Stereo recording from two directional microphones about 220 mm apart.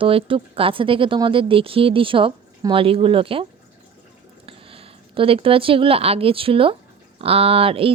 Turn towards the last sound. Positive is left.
turn(degrees=-25)  # may be behind; listen again after turning